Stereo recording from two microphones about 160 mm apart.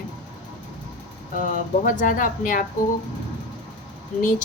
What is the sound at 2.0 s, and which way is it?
Speech, 55° left (ahead or behind).